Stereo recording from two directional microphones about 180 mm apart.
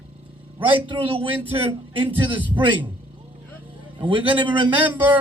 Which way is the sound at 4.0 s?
30° right (ahead or behind).